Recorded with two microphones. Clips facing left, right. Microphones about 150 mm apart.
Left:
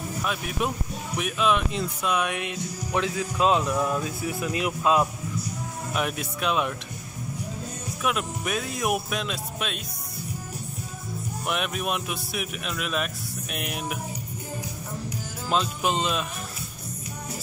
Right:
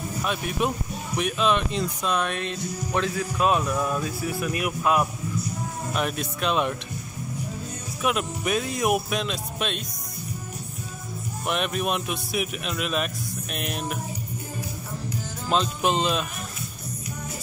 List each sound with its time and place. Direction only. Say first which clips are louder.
0.2 s a man's voice: right 2 dB; centre (ahead or behind); by 5.0 s 20° left (ahead or behind)
5.9 s a man's voice: right 1 dB; 5° left (ahead or behind)
8.0 s a man's voice: right 2 dB; centre (ahead or behind)
11.4 s a man's voice: right 3 dB; 5° left (ahead or behind)
15.5 s a man's voice: right 2 dB; 5° left (ahead or behind)